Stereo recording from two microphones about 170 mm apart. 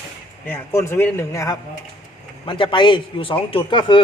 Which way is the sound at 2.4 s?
30° left (ahead or behind).